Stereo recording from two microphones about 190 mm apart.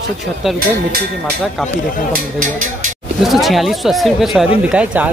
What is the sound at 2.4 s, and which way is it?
Speech, 40° right (ahead or behind).